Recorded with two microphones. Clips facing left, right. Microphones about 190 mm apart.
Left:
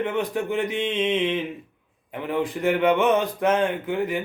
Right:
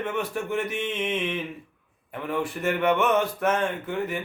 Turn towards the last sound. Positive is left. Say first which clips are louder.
# left 4 dB
turn(degrees=15)  # may be behind; listen again after turning